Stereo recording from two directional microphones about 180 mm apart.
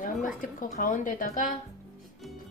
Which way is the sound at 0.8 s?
50° left (ahead or behind).